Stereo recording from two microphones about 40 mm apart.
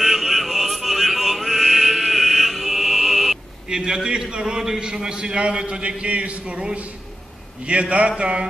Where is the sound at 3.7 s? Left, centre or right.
Centre.